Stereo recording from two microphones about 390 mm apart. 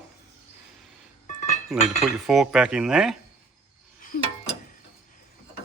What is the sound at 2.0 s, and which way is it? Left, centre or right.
Cutlery, centre.